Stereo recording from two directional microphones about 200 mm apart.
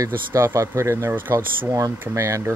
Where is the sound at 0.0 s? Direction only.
15° right (ahead or behind).